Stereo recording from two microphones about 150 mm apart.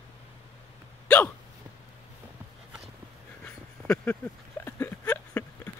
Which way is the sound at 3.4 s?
15° left (ahead or behind).